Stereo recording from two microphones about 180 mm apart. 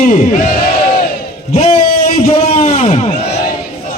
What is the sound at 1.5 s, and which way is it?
Speech, 35° left (ahead or behind).